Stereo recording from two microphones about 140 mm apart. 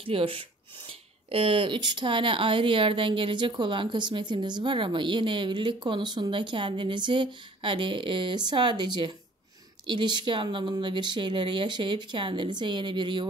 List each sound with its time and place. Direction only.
0.0 s speech: 40° right (ahead or behind)